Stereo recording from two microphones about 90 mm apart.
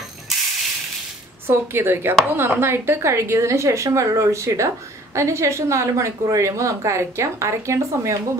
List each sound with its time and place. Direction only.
1.5 s a woman's voice: 25° right (ahead or behind)